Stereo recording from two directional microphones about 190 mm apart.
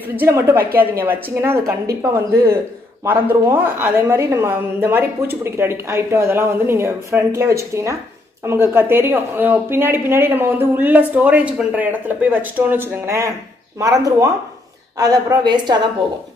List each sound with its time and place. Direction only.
0.1 s a woman's voice: 10° right (ahead or behind)